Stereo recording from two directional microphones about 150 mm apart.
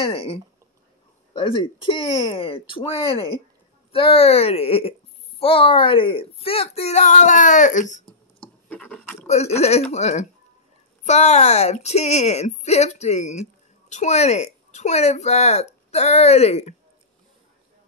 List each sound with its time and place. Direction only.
0.0 s a woman's voice: 40° left (ahead or behind); by 8.0 s 55° left (ahead or behind)
8.6 s a sound: 10° left (ahead or behind)
9.3 s a woman's voice: 45° left (ahead or behind)